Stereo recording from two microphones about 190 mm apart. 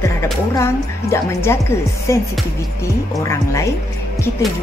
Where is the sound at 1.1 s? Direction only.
15° left (ahead or behind).